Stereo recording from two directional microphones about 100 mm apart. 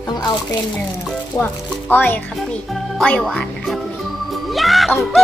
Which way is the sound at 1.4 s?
20° left (ahead or behind).